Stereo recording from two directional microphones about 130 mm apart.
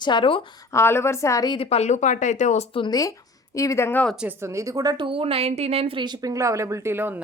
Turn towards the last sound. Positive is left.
turn(degrees=-15)  # may be behind; listen again after turning